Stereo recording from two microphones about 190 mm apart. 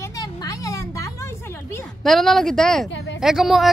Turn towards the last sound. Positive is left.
turn(degrees=0)  # may be behind; listen again after turning